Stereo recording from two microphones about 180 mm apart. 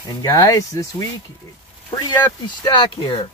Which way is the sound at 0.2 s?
20° left (ahead or behind).